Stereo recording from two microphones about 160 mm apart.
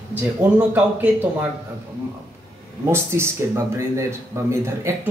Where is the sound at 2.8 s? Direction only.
15° right (ahead or behind).